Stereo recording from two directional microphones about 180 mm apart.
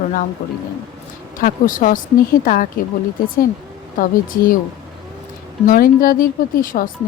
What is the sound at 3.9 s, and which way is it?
Speech, 50° left (ahead or behind).